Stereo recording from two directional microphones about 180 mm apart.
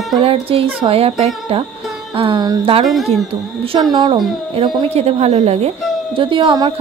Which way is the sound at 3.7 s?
25° right (ahead or behind).